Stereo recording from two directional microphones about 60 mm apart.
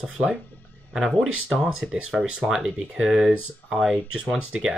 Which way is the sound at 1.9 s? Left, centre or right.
Centre.